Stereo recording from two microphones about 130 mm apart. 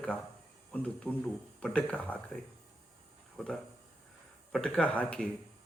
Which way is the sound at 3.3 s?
Centre (ahead or behind).